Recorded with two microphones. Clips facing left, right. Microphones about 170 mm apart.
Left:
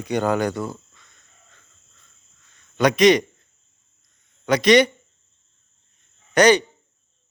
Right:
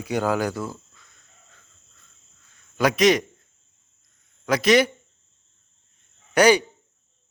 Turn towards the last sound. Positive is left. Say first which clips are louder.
# left 1 dB
turn(degrees=-10)  # may be behind; listen again after turning